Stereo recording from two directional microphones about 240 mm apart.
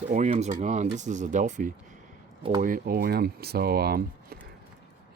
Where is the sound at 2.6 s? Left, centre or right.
Right.